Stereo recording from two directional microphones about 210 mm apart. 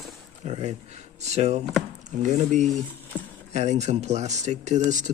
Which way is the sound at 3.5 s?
30° right (ahead or behind).